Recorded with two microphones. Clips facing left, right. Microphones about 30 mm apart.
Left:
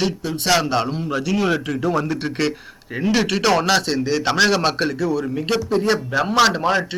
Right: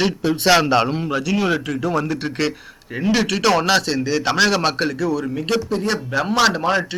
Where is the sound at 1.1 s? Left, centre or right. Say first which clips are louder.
Left 1 dB; centre.